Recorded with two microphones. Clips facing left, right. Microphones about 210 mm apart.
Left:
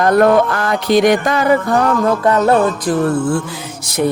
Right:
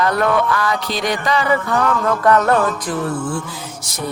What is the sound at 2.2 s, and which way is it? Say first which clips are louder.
Music: left 1 dB; 25° left (ahead or behind).